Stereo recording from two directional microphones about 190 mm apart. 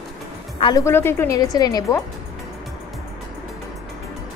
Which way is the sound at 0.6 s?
25° left (ahead or behind).